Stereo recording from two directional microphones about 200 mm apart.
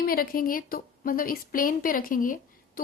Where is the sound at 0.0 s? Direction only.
45° left (ahead or behind).